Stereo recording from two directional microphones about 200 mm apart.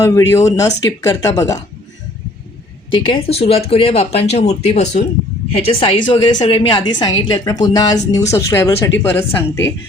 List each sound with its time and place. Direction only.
0.0 s speech: 15° left (ahead or behind)
2.9 s speech: 25° left (ahead or behind)
5.8 s a woman's voice: 25° left (ahead or behind)